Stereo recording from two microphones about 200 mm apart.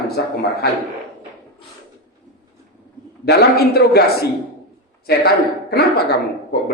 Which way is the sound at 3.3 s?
50° left (ahead or behind).